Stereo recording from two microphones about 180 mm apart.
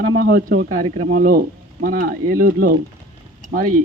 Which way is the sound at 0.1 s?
55° right (ahead or behind).